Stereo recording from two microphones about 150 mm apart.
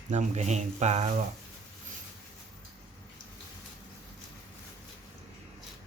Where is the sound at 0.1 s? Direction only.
50° right (ahead or behind).